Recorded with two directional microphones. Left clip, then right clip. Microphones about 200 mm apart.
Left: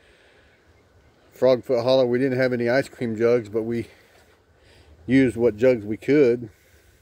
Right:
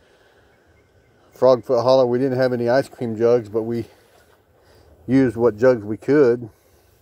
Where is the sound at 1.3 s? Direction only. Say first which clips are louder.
Right 4 dB; centre (ahead or behind).